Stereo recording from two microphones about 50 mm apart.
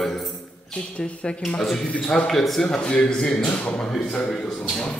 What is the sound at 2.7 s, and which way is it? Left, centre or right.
Speech, left.